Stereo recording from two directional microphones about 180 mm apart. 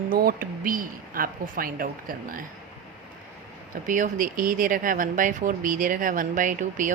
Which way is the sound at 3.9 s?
45° right (ahead or behind).